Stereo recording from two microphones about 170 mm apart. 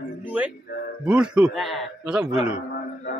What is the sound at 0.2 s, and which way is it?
Music, 10° right (ahead or behind).